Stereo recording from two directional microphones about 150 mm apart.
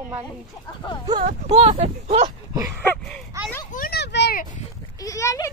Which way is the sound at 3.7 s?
80° left.